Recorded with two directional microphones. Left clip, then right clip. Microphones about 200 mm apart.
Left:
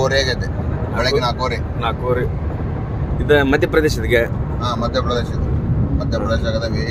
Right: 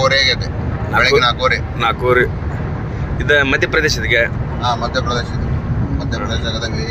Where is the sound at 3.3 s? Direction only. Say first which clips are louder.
Right 1 dB; 25° left (ahead or behind).